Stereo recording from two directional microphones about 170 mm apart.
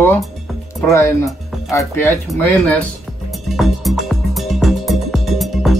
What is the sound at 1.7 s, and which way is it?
Music, 15° left (ahead or behind).